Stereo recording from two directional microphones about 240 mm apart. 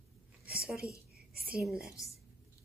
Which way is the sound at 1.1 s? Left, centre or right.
Right.